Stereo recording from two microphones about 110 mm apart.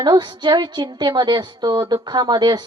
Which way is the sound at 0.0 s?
45° right (ahead or behind).